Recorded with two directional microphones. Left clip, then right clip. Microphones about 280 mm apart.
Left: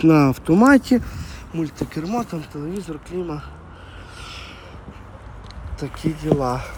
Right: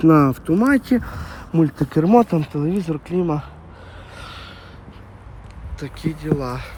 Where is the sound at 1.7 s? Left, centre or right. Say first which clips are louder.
Right 9 dB; centre.